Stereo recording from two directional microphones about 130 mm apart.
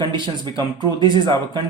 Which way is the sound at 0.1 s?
35° right (ahead or behind).